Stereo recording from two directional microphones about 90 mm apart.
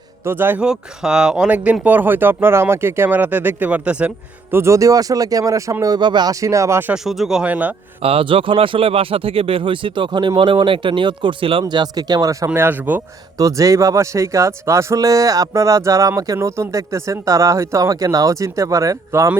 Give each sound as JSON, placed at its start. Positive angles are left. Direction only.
{"t": 0.3, "sound": "speech", "side_deg": -25}
{"t": 0.6, "sound": "speech", "side_deg": -10}
{"t": 4.5, "sound": "speech", "side_deg": -35}
{"t": 6.0, "sound": "speech", "side_deg": -55}
{"t": 6.3, "sound": "speech", "side_deg": -35}
{"t": 6.9, "sound": "speech", "side_deg": -5}
{"t": 7.5, "sound": "a man's voice", "side_deg": -15}
{"t": 8.0, "sound": "speech", "side_deg": -80}
{"t": 11.7, "sound": "speech", "side_deg": -50}
{"t": 12.5, "sound": "speech", "side_deg": -20}
{"t": 13.3, "sound": "speech", "side_deg": -40}